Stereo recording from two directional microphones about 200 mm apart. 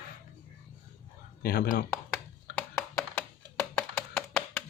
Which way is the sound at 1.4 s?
50° left (ahead or behind).